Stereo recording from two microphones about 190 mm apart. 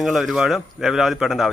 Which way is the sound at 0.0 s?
Centre (ahead or behind).